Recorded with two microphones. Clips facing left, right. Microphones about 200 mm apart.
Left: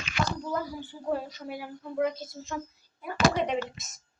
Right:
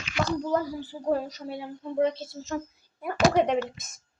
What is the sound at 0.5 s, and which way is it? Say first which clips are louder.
Speech: right 5 dB; 35° right (ahead or behind).